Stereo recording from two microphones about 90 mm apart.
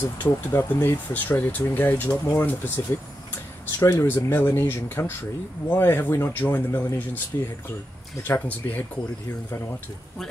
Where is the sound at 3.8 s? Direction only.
30° left (ahead or behind).